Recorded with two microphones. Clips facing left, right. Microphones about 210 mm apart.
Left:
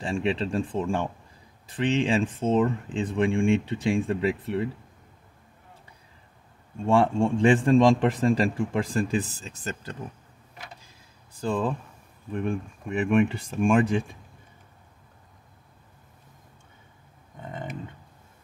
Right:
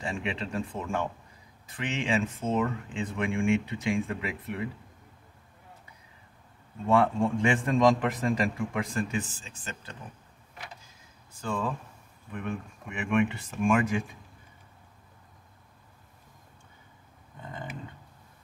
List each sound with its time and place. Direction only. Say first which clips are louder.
0.0 s a man's voice: left 7 dB; 35° left (ahead or behind)
6.9 s a man's voice: left 3 dB; 30° left (ahead or behind)
11.4 s a man's voice: left 5 dB; 35° left (ahead or behind)